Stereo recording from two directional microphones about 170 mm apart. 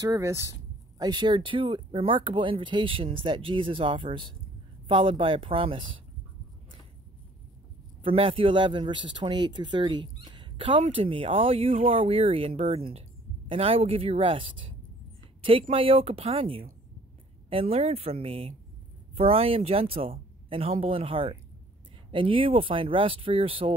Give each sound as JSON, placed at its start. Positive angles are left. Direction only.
{"t": 0.0, "sound": "speech", "side_deg": -20}
{"t": 8.0, "sound": "speech", "side_deg": -30}
{"t": 15.7, "sound": "speech", "side_deg": -35}